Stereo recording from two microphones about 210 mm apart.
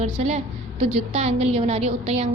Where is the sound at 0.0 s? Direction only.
30° right (ahead or behind).